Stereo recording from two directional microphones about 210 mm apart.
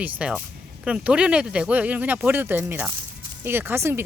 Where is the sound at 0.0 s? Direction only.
5° right (ahead or behind).